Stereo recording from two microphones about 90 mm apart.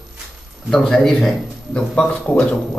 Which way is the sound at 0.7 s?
5° left (ahead or behind).